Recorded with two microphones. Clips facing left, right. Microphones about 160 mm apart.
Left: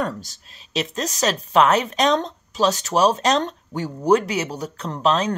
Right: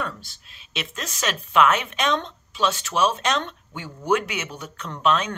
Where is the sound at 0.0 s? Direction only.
40° left (ahead or behind).